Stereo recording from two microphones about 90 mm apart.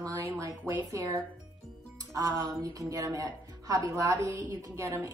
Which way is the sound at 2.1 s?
40° right (ahead or behind).